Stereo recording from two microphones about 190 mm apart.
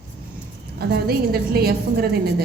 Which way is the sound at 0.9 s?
55° right (ahead or behind).